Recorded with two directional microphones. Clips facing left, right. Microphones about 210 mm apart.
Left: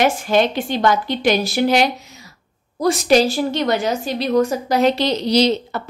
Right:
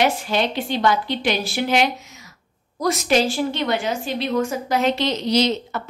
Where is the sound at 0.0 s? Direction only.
45° left (ahead or behind).